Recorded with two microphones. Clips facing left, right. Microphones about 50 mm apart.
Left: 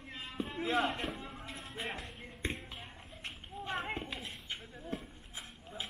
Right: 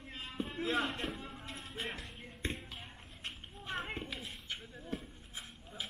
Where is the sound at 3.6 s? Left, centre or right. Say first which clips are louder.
Left 2 dB; centre.